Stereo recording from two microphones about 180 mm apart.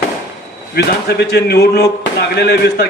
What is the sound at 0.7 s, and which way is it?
A man's voice, 65° left (ahead or behind).